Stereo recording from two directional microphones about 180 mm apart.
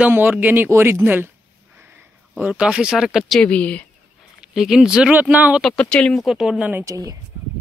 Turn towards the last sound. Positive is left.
turn(degrees=-20)  # may be behind; listen again after turning